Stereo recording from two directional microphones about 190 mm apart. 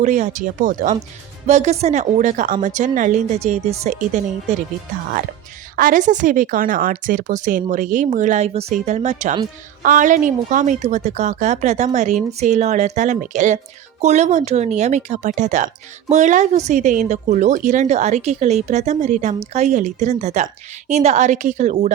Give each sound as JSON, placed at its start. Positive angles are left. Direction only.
{"t": 0.0, "sound": "speech", "side_deg": -40}
{"t": 5.7, "sound": "speech", "side_deg": -45}